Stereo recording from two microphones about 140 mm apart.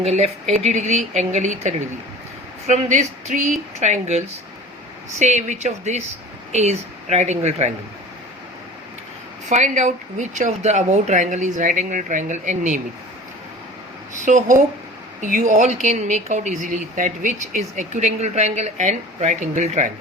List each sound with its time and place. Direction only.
0.0 s speech: 50° right (ahead or behind)
5.2 s speech: 55° right (ahead or behind)
9.5 s speech: 55° right (ahead or behind)
14.3 s speech: 65° right (ahead or behind)